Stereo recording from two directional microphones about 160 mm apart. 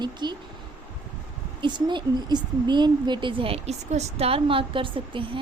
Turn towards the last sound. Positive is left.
turn(degrees=-30)  # may be behind; listen again after turning